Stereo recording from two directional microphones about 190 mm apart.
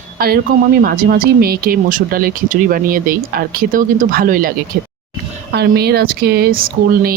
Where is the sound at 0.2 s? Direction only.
50° right (ahead or behind).